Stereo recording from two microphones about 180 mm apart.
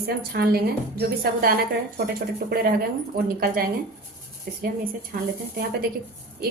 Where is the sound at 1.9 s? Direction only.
60° right (ahead or behind).